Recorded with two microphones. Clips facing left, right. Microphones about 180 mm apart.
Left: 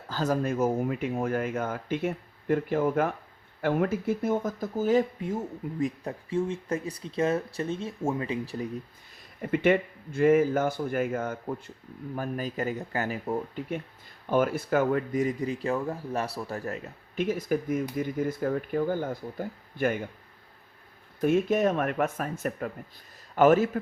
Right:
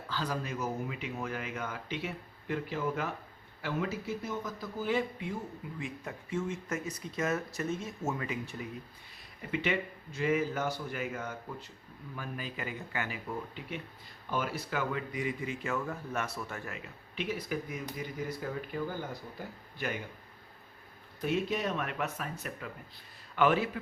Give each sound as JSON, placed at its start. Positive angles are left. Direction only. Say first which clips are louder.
{"t": 0.1, "sound": "speech", "louder": "left 9 dB", "side_deg": 45}
{"t": 9.4, "sound": "speech", "louder": "left 9 dB", "side_deg": 50}
{"t": 21.2, "sound": "speech", "louder": "left 8 dB", "side_deg": 50}